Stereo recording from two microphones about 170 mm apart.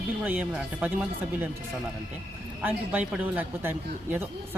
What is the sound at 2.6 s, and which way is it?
Speech, 10° right (ahead or behind).